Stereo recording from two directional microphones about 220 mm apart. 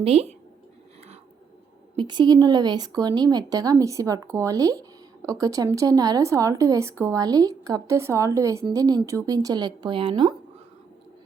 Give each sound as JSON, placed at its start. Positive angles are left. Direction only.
{"t": 0.0, "sound": "speech", "side_deg": -30}
{"t": 2.0, "sound": "speech", "side_deg": -20}